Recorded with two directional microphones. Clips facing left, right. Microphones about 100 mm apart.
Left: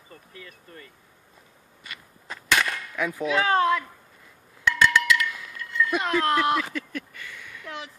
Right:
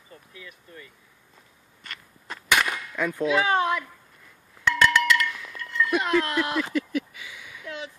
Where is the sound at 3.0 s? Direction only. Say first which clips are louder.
Right 2 dB; 15° left (ahead or behind).